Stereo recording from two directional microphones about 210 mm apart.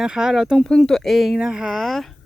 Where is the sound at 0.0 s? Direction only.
5° right (ahead or behind).